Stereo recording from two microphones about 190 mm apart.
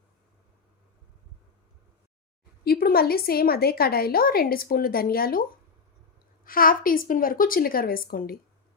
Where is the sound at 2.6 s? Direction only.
55° left (ahead or behind).